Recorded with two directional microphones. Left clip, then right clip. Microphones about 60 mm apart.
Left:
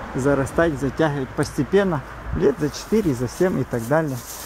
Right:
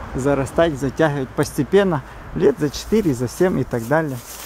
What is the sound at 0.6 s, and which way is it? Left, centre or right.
Speech, right.